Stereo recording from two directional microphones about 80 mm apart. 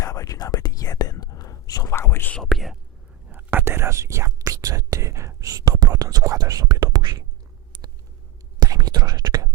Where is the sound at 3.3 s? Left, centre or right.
Right.